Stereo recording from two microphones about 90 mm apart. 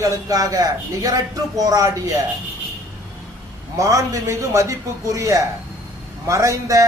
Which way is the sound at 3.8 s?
40° right (ahead or behind).